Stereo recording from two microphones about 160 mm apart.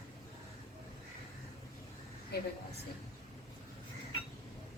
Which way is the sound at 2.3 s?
80° left.